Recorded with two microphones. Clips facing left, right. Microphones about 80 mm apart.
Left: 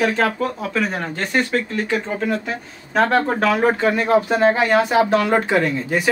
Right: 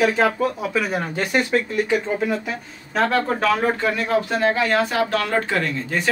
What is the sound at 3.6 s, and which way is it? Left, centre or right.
Speech, left.